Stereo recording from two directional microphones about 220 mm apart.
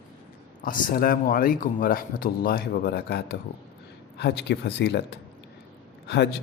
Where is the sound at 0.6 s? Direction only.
40° left (ahead or behind).